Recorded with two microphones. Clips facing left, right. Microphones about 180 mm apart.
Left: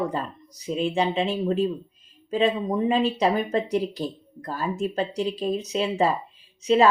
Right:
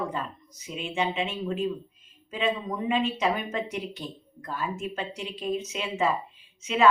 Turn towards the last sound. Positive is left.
turn(degrees=35)  # may be behind; listen again after turning